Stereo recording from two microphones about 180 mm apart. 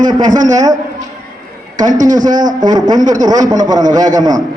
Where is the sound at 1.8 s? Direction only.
45° right (ahead or behind).